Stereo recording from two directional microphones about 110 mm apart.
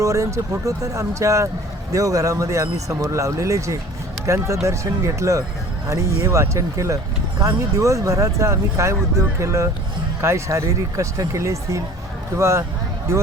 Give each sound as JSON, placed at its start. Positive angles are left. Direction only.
{"t": 0.0, "sound": "speech", "side_deg": -30}